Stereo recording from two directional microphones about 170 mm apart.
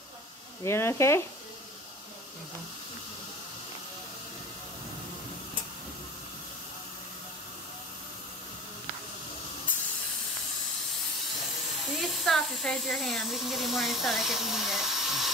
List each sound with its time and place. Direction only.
0.7 s speech: 15° left (ahead or behind)
12.3 s speech: centre (ahead or behind)